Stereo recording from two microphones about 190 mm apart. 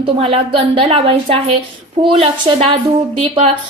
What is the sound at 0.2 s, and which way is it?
A woman's voice, 30° right (ahead or behind).